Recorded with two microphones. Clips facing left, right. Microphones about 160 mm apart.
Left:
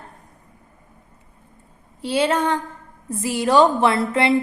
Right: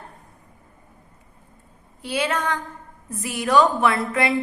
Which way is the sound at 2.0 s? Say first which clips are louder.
Left 5 dB; 30° left (ahead or behind).